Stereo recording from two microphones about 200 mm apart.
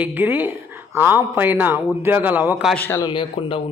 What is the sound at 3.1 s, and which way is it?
Speech, 25° left (ahead or behind).